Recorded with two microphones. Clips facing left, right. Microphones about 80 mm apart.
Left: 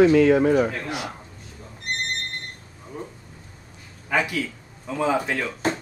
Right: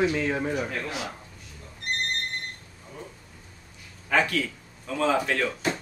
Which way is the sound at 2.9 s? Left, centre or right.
Left.